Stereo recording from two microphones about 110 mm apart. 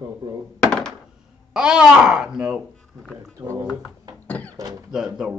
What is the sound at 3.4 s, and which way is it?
Speech, 30° right (ahead or behind).